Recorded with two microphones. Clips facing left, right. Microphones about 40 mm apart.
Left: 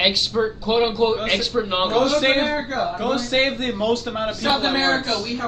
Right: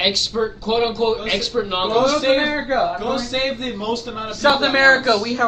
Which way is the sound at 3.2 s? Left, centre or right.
Left.